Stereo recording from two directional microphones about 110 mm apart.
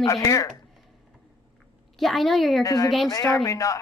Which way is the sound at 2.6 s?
30° left (ahead or behind).